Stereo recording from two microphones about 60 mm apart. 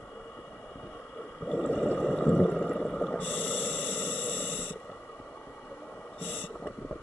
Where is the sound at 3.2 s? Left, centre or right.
Left.